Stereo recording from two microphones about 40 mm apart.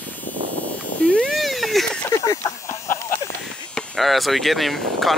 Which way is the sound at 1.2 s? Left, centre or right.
Centre.